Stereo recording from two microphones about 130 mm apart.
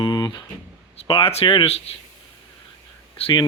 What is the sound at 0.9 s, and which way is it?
Speech, 45° left (ahead or behind).